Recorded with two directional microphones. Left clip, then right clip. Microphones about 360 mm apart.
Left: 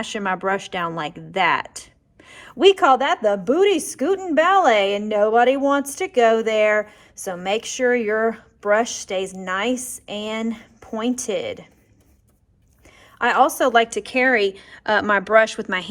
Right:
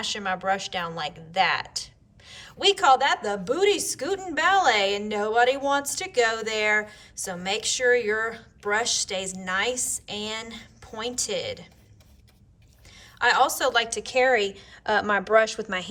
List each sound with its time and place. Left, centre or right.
0.0 s a woman's voice: centre
13.1 s a woman's voice: centre